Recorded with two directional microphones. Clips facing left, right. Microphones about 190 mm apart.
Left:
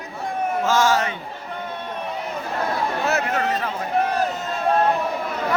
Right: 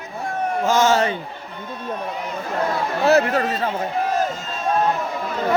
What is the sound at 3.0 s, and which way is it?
Speech, 35° right (ahead or behind).